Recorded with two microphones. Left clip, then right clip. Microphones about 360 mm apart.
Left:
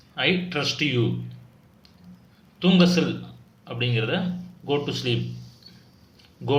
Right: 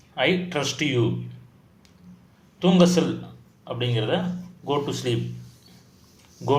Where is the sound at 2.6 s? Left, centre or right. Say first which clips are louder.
Right 2 dB; centre.